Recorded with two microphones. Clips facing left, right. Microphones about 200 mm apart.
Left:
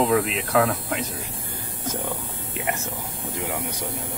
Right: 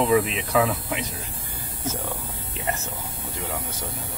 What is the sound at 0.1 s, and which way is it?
Speech, centre (ahead or behind).